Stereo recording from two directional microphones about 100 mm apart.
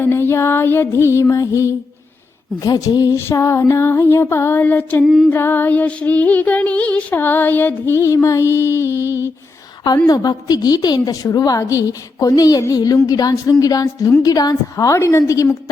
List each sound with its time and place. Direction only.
0.0 s music: 25° left (ahead or behind)
2.6 s a woman's voice: 40° left (ahead or behind)
3.2 s music: 30° left (ahead or behind)
5.0 s a sound: 5° right (ahead or behind)
5.3 s music: 20° left (ahead or behind)
9.0 s a sound: 25° right (ahead or behind)
10.1 s a woman's voice: 40° left (ahead or behind)